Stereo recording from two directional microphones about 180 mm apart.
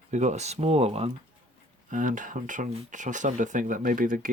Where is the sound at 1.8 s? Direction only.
45° right (ahead or behind).